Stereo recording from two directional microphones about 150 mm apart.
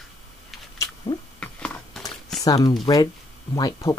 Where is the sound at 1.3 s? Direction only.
10° left (ahead or behind).